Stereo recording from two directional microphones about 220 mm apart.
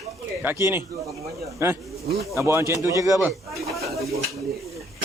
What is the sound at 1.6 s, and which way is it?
Speech, 10° right (ahead or behind).